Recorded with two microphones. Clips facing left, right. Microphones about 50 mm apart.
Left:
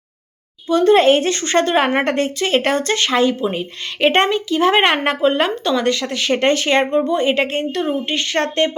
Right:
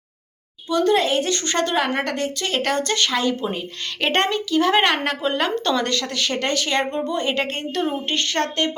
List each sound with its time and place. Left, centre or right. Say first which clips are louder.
0.7 s speech: left 7 dB; left
3.5 s a woman's voice: left 3 dB; centre
7.1 s a woman's voice: left 6 dB; centre
8.1 s a woman's voice: left 3 dB; centre